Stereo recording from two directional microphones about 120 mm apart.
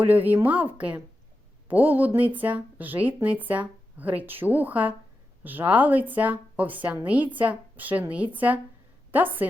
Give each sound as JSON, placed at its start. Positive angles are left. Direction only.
{"t": 0.0, "sound": "speech", "side_deg": -15}